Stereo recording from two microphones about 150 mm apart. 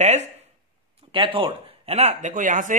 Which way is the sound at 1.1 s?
35° right (ahead or behind).